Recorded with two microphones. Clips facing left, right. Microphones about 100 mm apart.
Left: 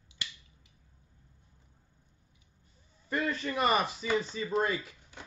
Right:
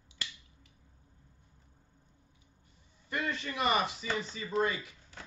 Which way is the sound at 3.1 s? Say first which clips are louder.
Left 3 dB; 40° left (ahead or behind).